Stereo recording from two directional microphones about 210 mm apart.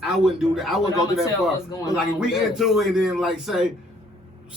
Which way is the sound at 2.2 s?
Centre (ahead or behind).